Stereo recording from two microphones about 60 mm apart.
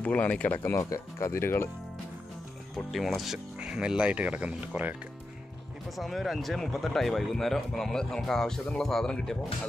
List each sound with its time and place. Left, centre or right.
0.0 s speech: left
0.7 s speech: left
1.3 s speech: left
2.9 s speech: centre
3.5 s speech: centre
5.9 s speech: centre